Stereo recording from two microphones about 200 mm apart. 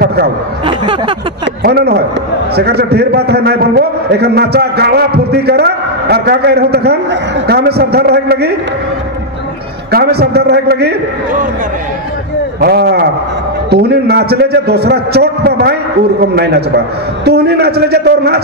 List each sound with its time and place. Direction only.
0.0 s speech: 55° right (ahead or behind)
0.7 s a sound: 25° right (ahead or behind)
1.6 s a man's voice: 55° right (ahead or behind)
9.8 s a man's voice: 55° right (ahead or behind)
12.5 s a man's voice: 55° right (ahead or behind)